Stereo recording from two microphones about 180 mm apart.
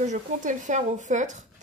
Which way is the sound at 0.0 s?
45° right (ahead or behind).